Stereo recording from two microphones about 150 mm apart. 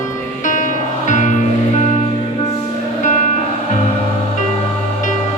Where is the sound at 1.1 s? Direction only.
55° left (ahead or behind).